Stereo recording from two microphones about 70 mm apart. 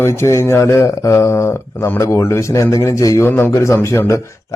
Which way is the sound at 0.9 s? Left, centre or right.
Left.